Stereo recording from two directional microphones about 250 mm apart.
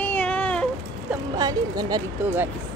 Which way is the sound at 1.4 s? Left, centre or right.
Centre.